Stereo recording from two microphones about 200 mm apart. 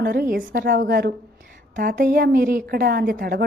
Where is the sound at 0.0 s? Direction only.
50° right (ahead or behind).